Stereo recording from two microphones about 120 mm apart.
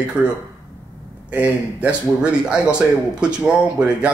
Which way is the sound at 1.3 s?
15° right (ahead or behind).